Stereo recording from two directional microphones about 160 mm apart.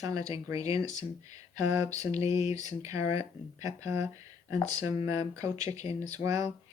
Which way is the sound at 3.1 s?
20° right (ahead or behind).